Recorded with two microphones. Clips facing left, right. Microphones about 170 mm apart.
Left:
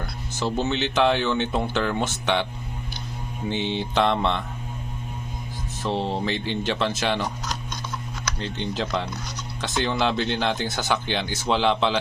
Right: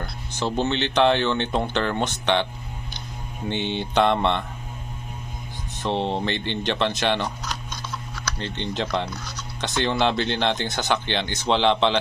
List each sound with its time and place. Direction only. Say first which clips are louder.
0.6 s speech: right 2 dB; 5° left (ahead or behind)
3.5 s speech: right 1 dB; centre (ahead or behind)
5.9 s mantra: right 1 dB; 25° right (ahead or behind)
6.2 s speech: even; 5° left (ahead or behind)
8.4 s speech: even; 5° left (ahead or behind)